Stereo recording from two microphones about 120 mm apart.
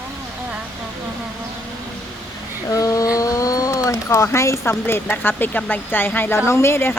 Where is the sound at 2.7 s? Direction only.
30° left (ahead or behind).